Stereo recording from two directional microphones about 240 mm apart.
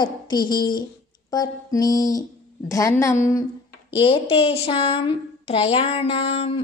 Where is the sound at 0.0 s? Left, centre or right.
Centre.